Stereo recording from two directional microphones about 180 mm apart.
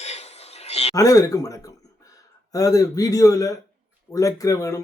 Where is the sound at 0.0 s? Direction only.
35° left (ahead or behind).